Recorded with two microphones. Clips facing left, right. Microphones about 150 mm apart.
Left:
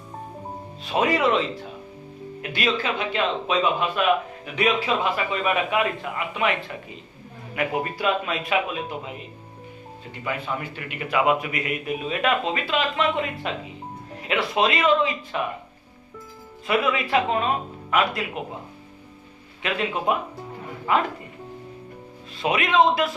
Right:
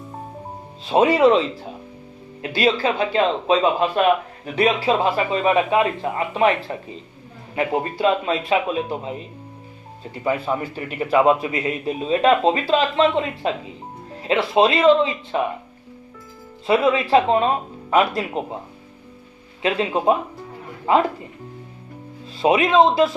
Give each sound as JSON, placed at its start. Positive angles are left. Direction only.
{"t": 0.9, "sound": "speech", "side_deg": -30}
{"t": 2.4, "sound": "a man's voice", "side_deg": -30}
{"t": 10.2, "sound": "a man's voice", "side_deg": -35}
{"t": 16.6, "sound": "a man's voice", "side_deg": -30}
{"t": 19.6, "sound": "a man's voice", "side_deg": -30}
{"t": 22.4, "sound": "a man's voice", "side_deg": -30}